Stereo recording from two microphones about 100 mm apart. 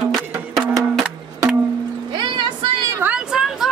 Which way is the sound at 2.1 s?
50° right (ahead or behind).